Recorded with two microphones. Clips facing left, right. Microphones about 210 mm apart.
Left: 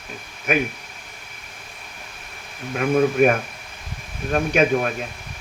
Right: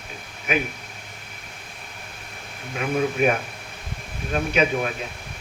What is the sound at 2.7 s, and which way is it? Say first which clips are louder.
Speech: left 5 dB; 50° left (ahead or behind).